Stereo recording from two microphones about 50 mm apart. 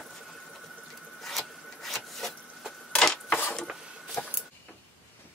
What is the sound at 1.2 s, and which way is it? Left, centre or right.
Wood, centre.